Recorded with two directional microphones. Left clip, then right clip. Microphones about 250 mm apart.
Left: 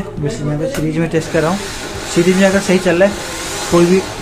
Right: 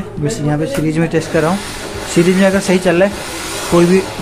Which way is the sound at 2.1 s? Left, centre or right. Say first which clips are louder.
Even; centre.